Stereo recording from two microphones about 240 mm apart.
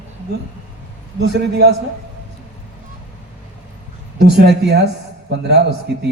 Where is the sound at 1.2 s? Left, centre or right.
Right.